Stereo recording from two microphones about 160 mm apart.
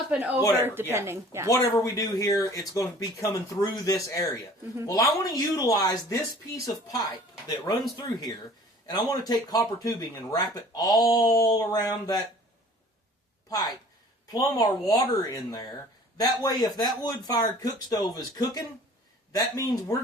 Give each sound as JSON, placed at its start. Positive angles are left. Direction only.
{"t": 0.1, "sound": "speech", "side_deg": -10}
{"t": 1.5, "sound": "speech", "side_deg": 15}
{"t": 7.4, "sound": "speech", "side_deg": 25}
{"t": 13.5, "sound": "speech", "side_deg": 25}